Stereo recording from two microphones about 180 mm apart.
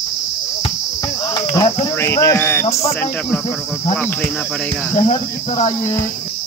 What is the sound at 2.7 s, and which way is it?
Speech, 35° left (ahead or behind).